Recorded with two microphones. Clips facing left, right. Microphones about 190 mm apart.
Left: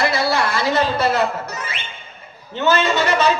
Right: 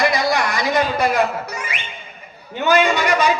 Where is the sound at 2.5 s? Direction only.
15° right (ahead or behind).